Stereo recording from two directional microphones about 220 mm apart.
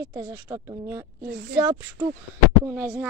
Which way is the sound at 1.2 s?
50° right (ahead or behind).